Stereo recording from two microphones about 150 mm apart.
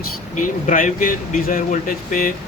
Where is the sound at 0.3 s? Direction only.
60° left (ahead or behind).